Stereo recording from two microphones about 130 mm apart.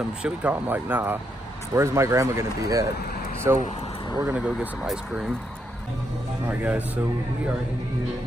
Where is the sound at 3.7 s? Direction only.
55° left (ahead or behind).